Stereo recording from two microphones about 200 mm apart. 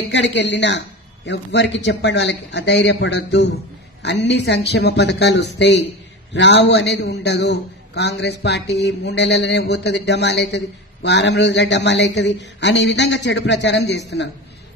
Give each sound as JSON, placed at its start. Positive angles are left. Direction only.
{"t": 0.1, "sound": "a man's voice", "side_deg": 65}